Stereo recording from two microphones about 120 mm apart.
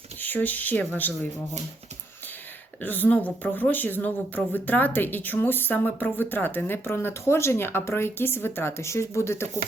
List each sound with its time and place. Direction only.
0.2 s speech: 15° left (ahead or behind)
2.8 s speech: 15° left (ahead or behind)